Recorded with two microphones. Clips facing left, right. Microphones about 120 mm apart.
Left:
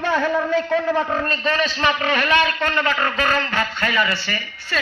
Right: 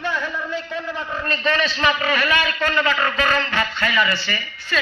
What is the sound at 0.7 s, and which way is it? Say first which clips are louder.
Speech: left 8 dB; 55° left (ahead or behind).